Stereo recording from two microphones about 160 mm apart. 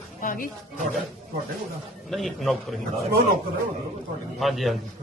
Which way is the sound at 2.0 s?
Centre (ahead or behind).